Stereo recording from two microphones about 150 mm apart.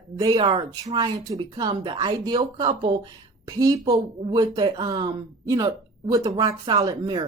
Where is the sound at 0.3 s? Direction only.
30° right (ahead or behind).